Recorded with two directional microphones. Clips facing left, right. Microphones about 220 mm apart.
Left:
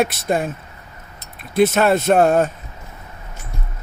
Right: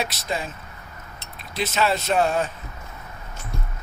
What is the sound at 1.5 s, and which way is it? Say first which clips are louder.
Speech: left 9 dB; 55° left (ahead or behind).